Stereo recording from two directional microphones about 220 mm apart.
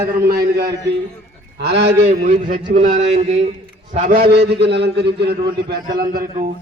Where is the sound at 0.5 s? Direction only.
50° right (ahead or behind).